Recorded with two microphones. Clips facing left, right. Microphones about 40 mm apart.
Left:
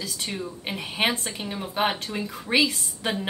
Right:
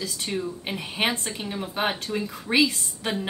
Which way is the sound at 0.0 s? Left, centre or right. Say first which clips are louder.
Right 2 dB; centre.